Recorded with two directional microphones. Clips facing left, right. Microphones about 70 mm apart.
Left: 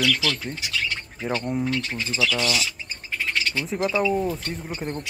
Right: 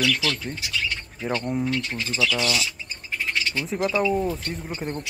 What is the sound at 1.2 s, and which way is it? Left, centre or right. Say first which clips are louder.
Speech: even; centre.